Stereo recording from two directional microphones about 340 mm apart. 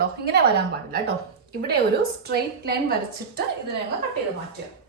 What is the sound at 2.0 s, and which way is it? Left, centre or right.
Speech, right.